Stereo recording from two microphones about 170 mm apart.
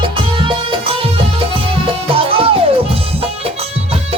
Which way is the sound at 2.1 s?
35° right (ahead or behind).